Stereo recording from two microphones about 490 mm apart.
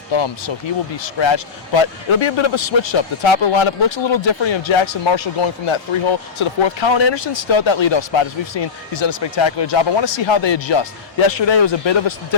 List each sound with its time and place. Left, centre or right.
0.1 s a man's voice: left